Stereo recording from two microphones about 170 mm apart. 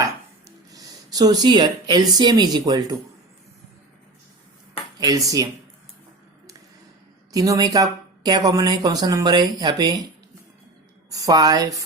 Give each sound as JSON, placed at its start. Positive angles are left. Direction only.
{"t": 0.0, "sound": "a sound", "side_deg": -20}
{"t": 4.9, "sound": "a woman's voice", "side_deg": -20}
{"t": 7.3, "sound": "a woman's voice", "side_deg": -20}
{"t": 11.1, "sound": "a woman's voice", "side_deg": -20}